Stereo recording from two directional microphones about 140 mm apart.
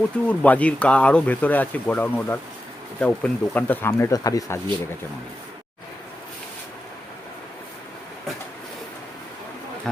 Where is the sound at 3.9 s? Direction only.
25° left (ahead or behind).